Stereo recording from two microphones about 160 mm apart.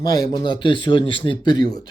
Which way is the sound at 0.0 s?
20° left (ahead or behind).